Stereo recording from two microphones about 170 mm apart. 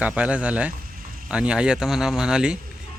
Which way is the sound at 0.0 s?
5° right (ahead or behind).